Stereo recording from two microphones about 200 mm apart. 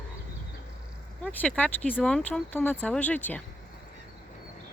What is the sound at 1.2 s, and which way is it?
Speech, 5° left (ahead or behind).